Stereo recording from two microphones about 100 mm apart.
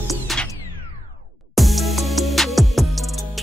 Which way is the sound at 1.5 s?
Centre (ahead or behind).